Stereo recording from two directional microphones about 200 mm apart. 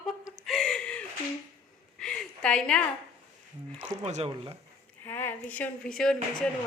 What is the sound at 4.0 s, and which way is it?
Speech, 30° right (ahead or behind).